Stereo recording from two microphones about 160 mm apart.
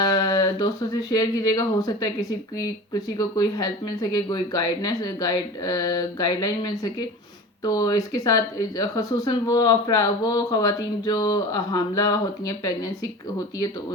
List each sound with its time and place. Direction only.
0.0 s speech: 25° left (ahead or behind)